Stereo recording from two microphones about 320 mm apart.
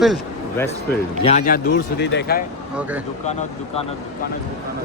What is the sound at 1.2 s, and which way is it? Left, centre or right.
Speech, left.